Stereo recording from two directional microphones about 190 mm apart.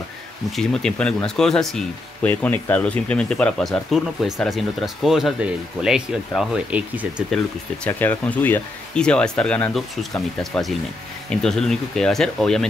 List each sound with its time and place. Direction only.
0.5 s speech: 5° left (ahead or behind)
7.8 s speech: 10° left (ahead or behind)